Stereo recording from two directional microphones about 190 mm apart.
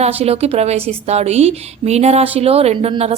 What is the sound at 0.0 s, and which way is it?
A woman's voice, 30° right (ahead or behind).